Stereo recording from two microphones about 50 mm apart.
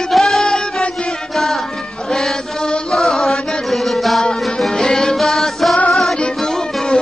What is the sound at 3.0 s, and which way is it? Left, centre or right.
Music, centre.